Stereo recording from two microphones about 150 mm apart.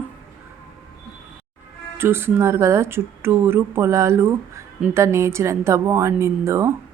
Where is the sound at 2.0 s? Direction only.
15° right (ahead or behind).